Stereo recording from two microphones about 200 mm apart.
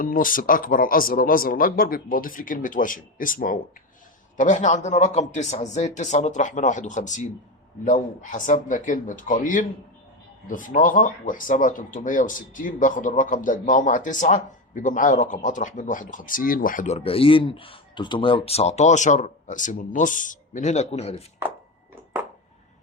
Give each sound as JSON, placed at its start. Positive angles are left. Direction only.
{"t": 0.0, "sound": "speech", "side_deg": 45}